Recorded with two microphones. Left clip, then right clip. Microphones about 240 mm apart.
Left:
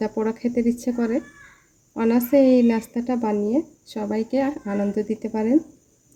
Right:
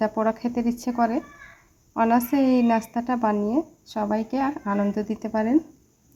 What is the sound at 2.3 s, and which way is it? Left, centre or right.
Speech, centre.